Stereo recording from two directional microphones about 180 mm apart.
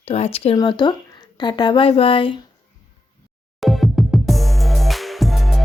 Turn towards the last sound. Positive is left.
turn(degrees=0)  # may be behind; listen again after turning